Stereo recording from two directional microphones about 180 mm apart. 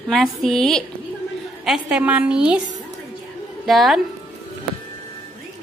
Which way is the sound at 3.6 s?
Centre (ahead or behind).